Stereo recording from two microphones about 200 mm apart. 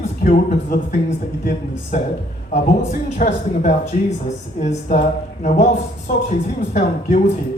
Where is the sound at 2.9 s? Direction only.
40° left (ahead or behind).